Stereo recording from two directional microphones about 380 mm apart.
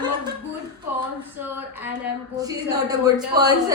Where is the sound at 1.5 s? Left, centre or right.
Centre.